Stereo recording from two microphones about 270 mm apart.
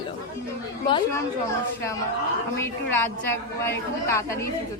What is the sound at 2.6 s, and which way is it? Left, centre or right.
A woman's voice, centre.